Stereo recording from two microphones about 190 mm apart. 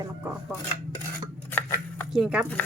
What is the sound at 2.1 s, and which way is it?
Speech, 5° right (ahead or behind).